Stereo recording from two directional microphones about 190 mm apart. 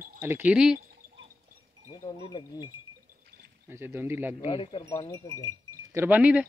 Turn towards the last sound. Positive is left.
turn(degrees=-5)  # may be behind; listen again after turning